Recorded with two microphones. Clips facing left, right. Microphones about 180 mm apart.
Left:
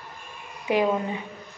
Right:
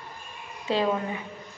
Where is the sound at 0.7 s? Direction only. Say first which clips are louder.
Left 3 dB; 15° left (ahead or behind).